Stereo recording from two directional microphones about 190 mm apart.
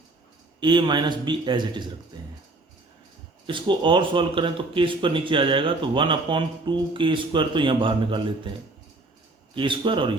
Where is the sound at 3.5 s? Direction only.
25° right (ahead or behind).